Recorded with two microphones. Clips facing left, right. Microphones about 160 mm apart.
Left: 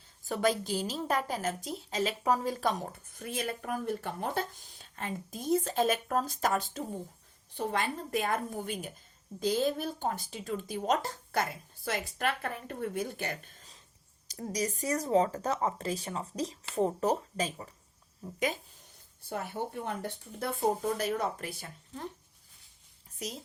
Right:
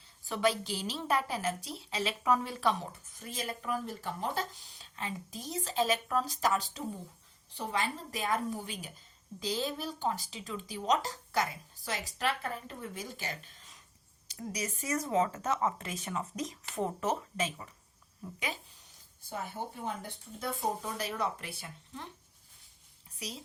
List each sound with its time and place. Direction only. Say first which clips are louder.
0.3 s a woman's voice: left 2 dB; 45° left (ahead or behind)
14.3 s a woman's voice: left 5 dB; 40° left (ahead or behind)
19.3 s speech: left 4 dB; 65° left (ahead or behind)
20.8 s a woman's voice: left 4 dB; 50° left (ahead or behind)